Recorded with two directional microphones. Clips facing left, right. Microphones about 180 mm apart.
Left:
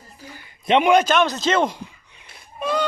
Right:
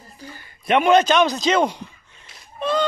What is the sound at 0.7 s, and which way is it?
Speech, 15° left (ahead or behind).